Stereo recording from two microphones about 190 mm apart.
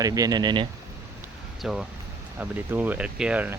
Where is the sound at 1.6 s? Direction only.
5° right (ahead or behind).